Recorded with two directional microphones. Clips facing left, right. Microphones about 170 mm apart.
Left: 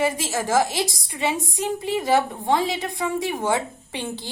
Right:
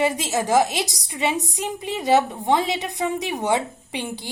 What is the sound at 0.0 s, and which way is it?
A woman's voice, 20° right (ahead or behind).